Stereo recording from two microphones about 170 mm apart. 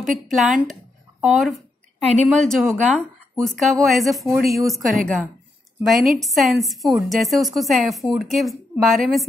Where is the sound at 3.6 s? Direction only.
Centre (ahead or behind).